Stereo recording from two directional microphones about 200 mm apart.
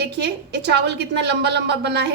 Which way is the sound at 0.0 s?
55° right (ahead or behind).